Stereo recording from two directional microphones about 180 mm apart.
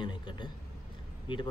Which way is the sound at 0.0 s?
25° left (ahead or behind).